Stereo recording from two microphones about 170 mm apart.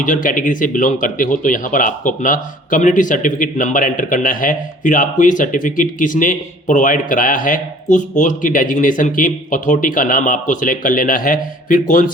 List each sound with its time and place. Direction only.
0.0 s speech: 50° left (ahead or behind)